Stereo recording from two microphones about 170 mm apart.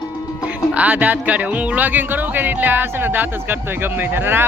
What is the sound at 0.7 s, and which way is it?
Speech, 10° right (ahead or behind).